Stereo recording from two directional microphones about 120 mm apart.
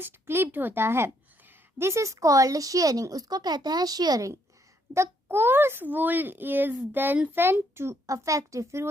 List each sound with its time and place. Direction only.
0.0 s a woman's voice: 20° right (ahead or behind)
4.9 s a child's voice: 20° right (ahead or behind)